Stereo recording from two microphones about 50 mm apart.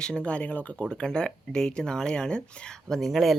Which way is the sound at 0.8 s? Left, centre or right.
Centre.